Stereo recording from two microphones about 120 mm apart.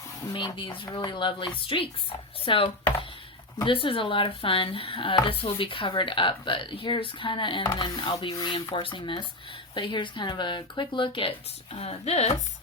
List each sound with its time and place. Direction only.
0.3 s speech: 45° left (ahead or behind); by 12.3 s 60° left (ahead or behind)